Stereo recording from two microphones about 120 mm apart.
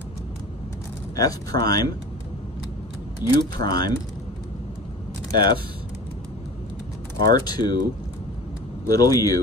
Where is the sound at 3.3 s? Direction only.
35° left (ahead or behind).